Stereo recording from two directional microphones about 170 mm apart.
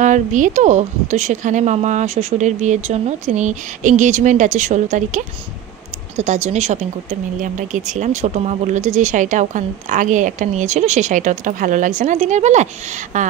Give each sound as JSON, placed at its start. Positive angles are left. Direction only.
{"t": 0.0, "sound": "speech", "side_deg": -45}
{"t": 6.1, "sound": "speech", "side_deg": -45}